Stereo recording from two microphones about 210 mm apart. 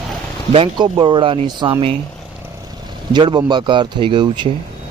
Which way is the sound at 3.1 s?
20° right (ahead or behind).